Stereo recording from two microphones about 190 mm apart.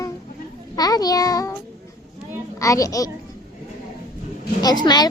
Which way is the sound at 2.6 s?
15° left (ahead or behind).